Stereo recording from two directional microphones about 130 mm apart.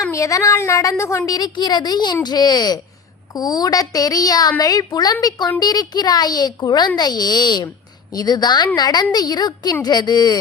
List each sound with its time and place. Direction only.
0.1 s a woman's voice: 25° left (ahead or behind)